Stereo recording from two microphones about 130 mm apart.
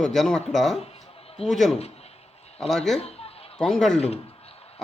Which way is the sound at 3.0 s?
50° left (ahead or behind).